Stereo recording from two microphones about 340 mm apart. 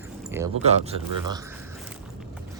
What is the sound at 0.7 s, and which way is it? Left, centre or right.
Speech, centre.